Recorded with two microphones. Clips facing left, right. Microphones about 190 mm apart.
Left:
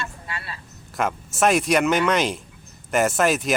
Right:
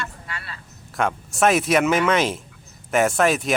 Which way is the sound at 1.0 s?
Centre (ahead or behind).